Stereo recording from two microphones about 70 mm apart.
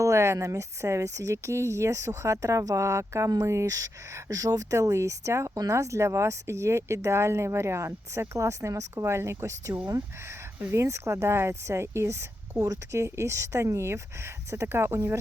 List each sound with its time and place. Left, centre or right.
0.0 s speech: right
12.5 s speech: right
12.9 s speech: right